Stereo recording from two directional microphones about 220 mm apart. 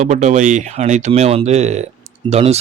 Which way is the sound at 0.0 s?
35° right (ahead or behind).